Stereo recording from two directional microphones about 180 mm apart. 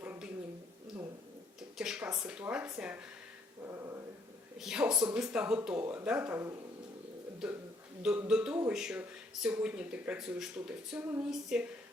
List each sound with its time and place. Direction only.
0.0 s a sound: 10° right (ahead or behind)
1.8 s speech: 5° right (ahead or behind)
3.7 s dog: 15° right (ahead or behind)
4.6 s speech: 5° right (ahead or behind)
8.0 s speech: 5° right (ahead or behind)